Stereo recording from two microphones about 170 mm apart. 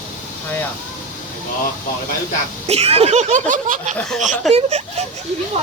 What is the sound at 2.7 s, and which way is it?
Speech, 40° right (ahead or behind).